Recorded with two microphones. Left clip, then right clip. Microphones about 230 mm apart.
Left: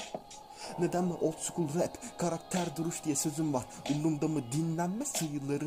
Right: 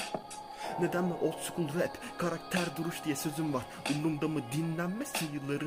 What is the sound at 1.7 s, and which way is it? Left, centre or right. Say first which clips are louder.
Speech: right 1 dB; centre.